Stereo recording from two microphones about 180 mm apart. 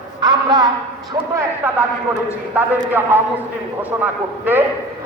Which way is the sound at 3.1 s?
10° right (ahead or behind).